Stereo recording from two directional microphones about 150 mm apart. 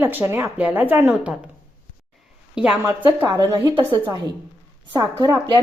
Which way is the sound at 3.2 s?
20° right (ahead or behind).